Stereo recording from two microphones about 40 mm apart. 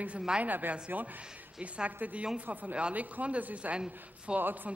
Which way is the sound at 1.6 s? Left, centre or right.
Right.